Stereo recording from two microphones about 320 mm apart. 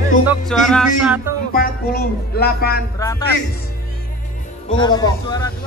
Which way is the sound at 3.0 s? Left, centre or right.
Centre.